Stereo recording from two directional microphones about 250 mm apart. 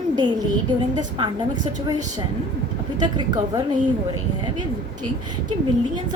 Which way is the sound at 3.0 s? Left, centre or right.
Centre.